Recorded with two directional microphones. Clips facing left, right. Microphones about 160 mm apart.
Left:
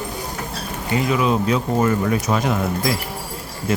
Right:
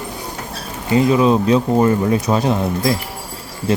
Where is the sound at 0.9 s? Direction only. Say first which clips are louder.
Right 6 dB; 30° right (ahead or behind).